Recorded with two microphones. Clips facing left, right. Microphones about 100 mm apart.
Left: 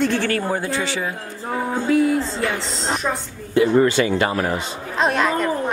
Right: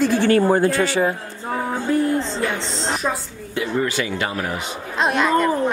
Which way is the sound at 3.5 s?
35° left (ahead or behind).